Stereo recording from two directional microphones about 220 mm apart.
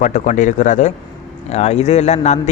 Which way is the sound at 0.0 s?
35° left (ahead or behind).